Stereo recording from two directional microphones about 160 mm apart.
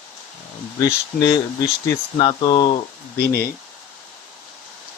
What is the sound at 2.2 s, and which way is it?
Speech, 35° left (ahead or behind).